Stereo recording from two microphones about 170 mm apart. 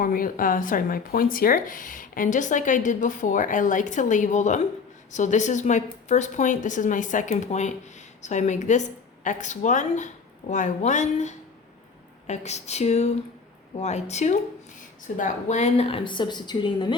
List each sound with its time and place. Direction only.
0.0 s a woman's voice: 55° left (ahead or behind); by 17.0 s 25° left (ahead or behind)